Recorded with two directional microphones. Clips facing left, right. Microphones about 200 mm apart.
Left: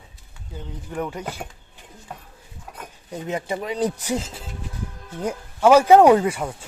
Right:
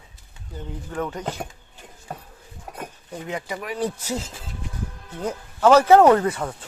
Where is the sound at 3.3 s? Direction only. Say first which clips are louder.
Left 4 dB; 25° left (ahead or behind).